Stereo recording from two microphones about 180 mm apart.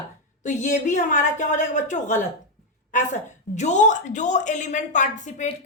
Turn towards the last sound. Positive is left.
turn(degrees=40)  # may be behind; listen again after turning